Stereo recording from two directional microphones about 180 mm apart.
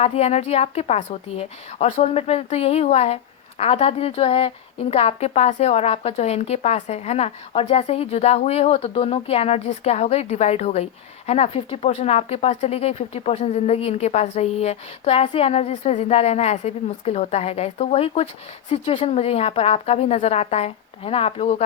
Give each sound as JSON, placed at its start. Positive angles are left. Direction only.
{"t": 0.0, "sound": "a woman's voice", "side_deg": 35}